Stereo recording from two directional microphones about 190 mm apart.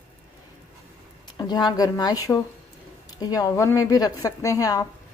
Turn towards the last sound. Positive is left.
turn(degrees=20)  # may be behind; listen again after turning